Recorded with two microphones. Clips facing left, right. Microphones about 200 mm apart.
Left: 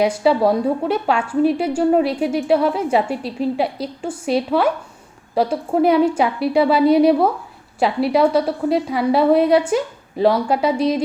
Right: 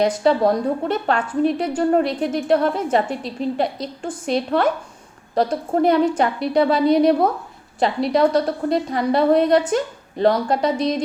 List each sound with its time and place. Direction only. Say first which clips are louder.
0.0 s a woman's voice: left 1 dB; 5° left (ahead or behind)